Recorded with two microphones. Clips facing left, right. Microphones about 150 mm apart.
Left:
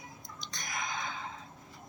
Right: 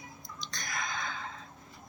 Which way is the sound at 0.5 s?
15° left (ahead or behind).